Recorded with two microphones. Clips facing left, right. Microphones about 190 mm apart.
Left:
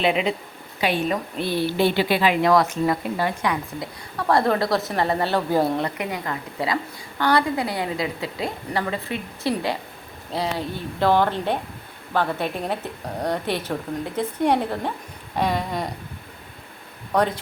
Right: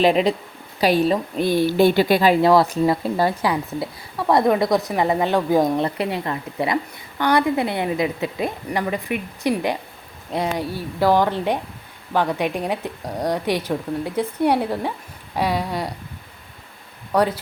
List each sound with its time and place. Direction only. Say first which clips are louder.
0.0 s a woman's voice: right 5 dB; 40° right (ahead or behind)
4.3 s a woman's voice: right 3 dB; 15° right (ahead or behind)
6.0 s a woman's voice: right 4 dB; 30° right (ahead or behind)
10.7 s a woman's voice: right 2 dB; 10° right (ahead or behind)
17.1 s a woman's voice: right 2 dB; 10° right (ahead or behind)